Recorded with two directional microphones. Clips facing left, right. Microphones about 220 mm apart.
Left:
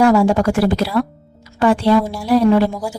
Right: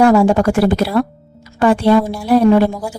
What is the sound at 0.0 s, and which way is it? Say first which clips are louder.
A woman's voice: right 2 dB; 55° right (ahead or behind).